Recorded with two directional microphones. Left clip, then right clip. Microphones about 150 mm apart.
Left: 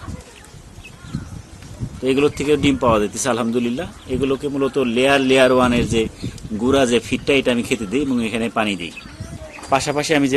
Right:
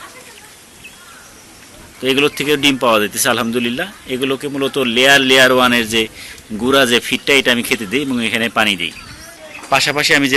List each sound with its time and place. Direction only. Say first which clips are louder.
2.0 s a man's voice: right 2 dB; 5° left (ahead or behind)